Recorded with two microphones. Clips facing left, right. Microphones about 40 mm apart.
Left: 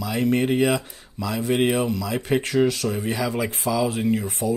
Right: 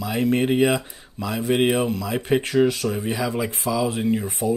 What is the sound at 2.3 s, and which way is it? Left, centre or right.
Speech, centre.